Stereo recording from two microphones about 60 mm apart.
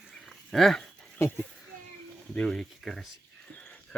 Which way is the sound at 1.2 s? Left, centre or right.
Left.